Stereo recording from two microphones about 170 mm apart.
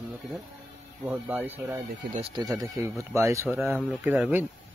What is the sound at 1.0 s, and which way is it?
Speech, 10° right (ahead or behind).